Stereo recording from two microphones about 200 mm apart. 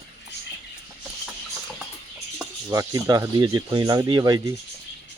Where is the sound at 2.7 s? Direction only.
15° right (ahead or behind).